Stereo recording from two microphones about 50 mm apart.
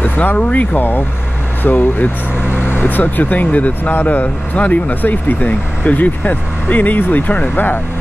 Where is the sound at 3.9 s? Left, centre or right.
Left.